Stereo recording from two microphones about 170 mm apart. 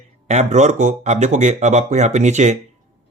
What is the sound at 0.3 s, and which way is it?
Speech, 45° right (ahead or behind).